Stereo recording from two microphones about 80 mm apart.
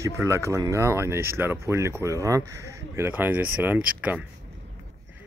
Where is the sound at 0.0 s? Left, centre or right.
Right.